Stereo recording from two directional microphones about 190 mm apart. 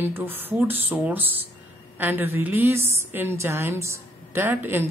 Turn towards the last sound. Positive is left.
turn(degrees=-10)  # may be behind; listen again after turning